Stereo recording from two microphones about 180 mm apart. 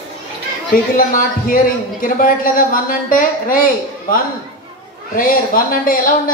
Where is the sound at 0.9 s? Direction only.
50° left (ahead or behind).